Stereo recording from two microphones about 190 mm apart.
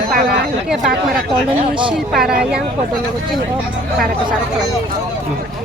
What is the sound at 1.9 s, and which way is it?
Speech, centre (ahead or behind).